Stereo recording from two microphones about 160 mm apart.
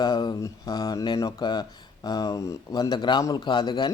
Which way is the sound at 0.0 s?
25° left (ahead or behind).